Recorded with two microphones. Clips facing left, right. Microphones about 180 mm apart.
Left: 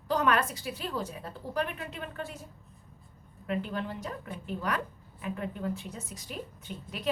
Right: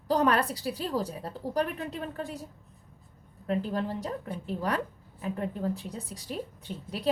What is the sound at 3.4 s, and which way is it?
A woman's voice, 35° right (ahead or behind).